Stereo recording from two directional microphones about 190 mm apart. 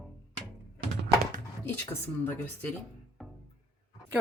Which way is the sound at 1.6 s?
10° left (ahead or behind).